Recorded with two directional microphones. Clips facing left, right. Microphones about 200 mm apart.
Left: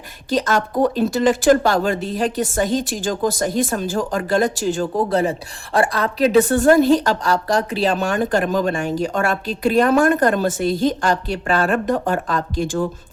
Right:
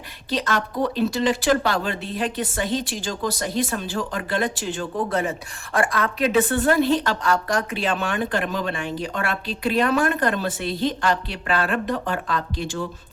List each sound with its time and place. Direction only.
0.3 s speech: 45° left (ahead or behind)